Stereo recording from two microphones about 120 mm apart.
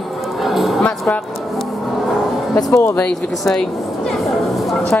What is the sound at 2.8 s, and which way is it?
Speech, 10° left (ahead or behind).